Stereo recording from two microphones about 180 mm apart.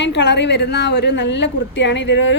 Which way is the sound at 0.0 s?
80° left.